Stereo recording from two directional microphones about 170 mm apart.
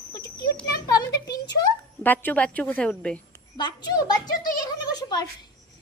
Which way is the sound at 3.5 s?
25° left (ahead or behind).